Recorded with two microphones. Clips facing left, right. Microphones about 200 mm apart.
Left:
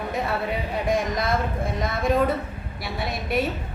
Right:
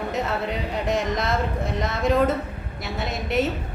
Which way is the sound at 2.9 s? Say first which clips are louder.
Right 1 dB; 20° right (ahead or behind).